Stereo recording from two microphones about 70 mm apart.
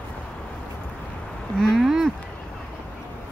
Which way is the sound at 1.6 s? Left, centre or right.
Centre.